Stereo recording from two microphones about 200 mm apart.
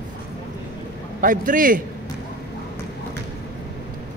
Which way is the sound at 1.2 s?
40° right (ahead or behind).